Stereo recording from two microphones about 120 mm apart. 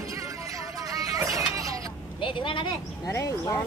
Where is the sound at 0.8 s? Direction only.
30° right (ahead or behind).